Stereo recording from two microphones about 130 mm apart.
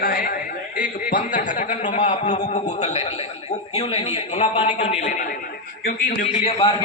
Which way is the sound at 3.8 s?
50° left (ahead or behind).